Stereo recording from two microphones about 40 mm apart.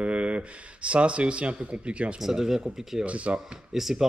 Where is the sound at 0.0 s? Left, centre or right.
Right.